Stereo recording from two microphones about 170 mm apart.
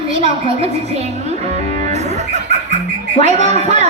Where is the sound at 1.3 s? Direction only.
40° right (ahead or behind).